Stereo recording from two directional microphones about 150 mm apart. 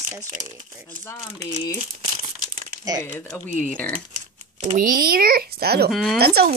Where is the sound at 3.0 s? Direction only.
15° left (ahead or behind).